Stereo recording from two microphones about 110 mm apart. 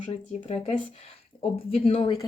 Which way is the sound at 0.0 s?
60° left (ahead or behind).